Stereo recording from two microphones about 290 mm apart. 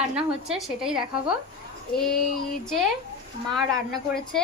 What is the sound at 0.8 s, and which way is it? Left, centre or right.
Speech, centre.